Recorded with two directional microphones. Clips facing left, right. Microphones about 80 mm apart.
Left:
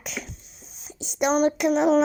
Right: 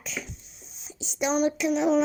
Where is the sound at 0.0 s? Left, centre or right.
Left.